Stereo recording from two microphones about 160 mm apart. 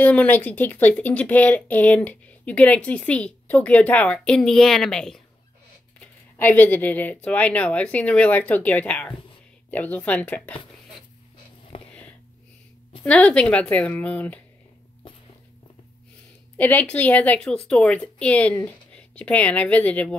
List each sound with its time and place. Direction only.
0.0 s speech: 10° left (ahead or behind)
11.7 s a sound: 35° left (ahead or behind)
13.0 s speech: 10° left (ahead or behind)
16.5 s speech: 10° left (ahead or behind)